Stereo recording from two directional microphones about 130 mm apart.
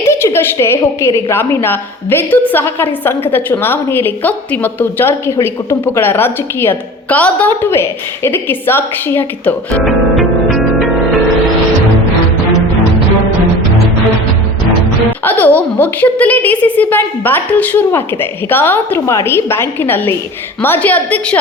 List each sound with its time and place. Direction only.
0.0 s a woman's voice: 20° left (ahead or behind)
9.8 s music: centre (ahead or behind)
15.2 s a woman's voice: 15° left (ahead or behind)